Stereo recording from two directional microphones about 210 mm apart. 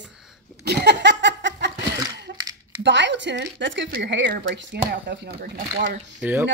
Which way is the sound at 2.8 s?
55° right (ahead or behind).